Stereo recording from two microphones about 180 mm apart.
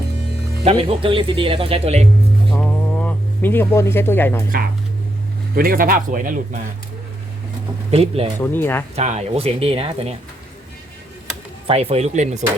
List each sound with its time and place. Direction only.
0.6 s speech: 35° right (ahead or behind)
2.5 s a sound: 5° left (ahead or behind)
5.5 s speech: 55° right (ahead or behind)
7.9 s speech: 35° right (ahead or behind)
8.4 s speech: 10° left (ahead or behind)
9.0 s speech: 35° right (ahead or behind)
11.7 s speech: 35° right (ahead or behind)